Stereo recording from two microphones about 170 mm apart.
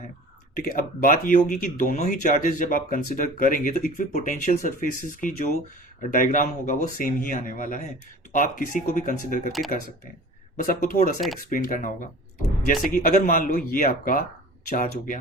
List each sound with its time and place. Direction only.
0.6 s speech: 55° left (ahead or behind)
10.6 s speech: 55° left (ahead or behind)